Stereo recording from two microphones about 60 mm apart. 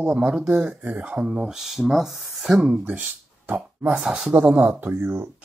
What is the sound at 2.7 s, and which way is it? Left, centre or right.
Speech, right.